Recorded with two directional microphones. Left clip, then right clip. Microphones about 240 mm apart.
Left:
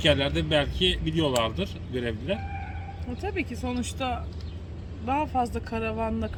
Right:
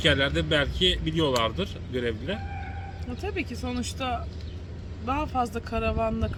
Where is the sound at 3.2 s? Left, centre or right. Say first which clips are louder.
Left 1 dB; centre.